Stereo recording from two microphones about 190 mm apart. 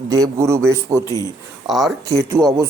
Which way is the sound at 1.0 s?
15° left (ahead or behind).